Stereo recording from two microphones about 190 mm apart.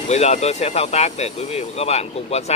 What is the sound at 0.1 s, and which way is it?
Speech, 35° left (ahead or behind).